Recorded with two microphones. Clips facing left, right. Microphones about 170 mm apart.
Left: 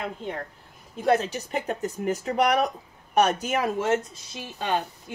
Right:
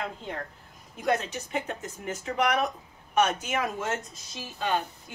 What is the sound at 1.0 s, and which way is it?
A woman's voice, 35° left (ahead or behind).